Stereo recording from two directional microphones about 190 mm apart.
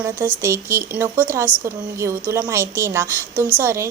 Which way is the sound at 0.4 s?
15° right (ahead or behind).